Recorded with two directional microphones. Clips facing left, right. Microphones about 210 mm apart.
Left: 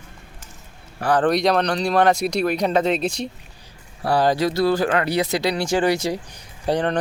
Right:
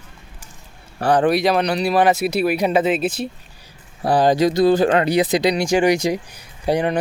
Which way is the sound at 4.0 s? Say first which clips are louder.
Right 3 dB; 20° right (ahead or behind).